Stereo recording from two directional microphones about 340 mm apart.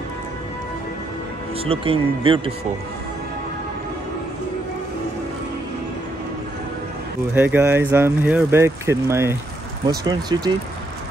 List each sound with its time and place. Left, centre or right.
1.6 s speech: centre
7.3 s speech: centre